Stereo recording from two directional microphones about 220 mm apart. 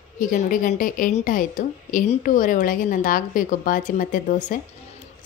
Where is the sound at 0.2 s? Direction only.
35° left (ahead or behind).